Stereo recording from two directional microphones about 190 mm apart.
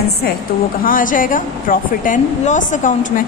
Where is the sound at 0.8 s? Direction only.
45° left (ahead or behind).